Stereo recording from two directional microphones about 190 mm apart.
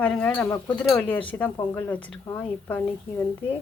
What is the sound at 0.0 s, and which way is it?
A woman's voice, 5° left (ahead or behind).